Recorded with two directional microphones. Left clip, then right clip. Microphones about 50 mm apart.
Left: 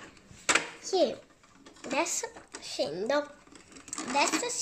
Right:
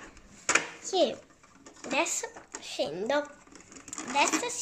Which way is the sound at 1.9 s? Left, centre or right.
Centre.